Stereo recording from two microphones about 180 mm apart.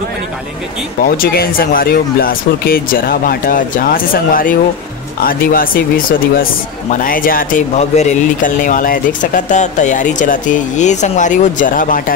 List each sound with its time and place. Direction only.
1.0 s speech: 55° left (ahead or behind)